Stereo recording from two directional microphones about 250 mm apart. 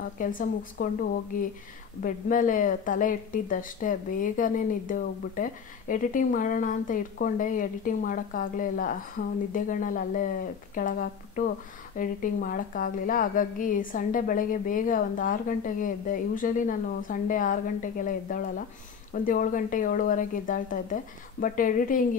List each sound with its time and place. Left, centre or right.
0.2 s speech: left
2.0 s speech: left